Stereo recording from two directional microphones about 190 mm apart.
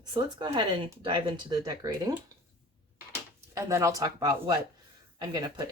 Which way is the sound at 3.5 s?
15° right (ahead or behind).